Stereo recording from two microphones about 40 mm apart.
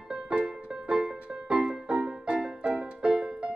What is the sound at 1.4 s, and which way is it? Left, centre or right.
Music, centre.